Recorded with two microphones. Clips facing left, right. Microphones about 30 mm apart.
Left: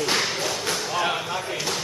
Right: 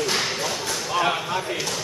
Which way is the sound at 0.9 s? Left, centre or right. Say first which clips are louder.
Right 5 dB; centre.